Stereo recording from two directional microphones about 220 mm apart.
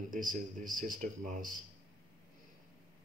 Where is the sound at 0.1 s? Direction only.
40° right (ahead or behind).